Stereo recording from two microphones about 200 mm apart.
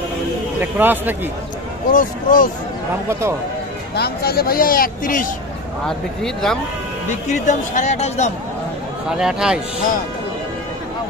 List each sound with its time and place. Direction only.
0.6 s a man's voice: 10° right (ahead or behind)
1.9 s speech: 40° left (ahead or behind)
3.1 s a man's voice: 10° right (ahead or behind)
3.9 s speech: 50° left (ahead or behind)
5.9 s speech: centre (ahead or behind)
7.4 s speech: 35° left (ahead or behind)
9.1 s speech: 5° right (ahead or behind)